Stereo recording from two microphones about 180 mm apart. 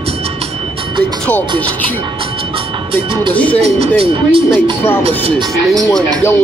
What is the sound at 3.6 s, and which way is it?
Speech, 30° right (ahead or behind).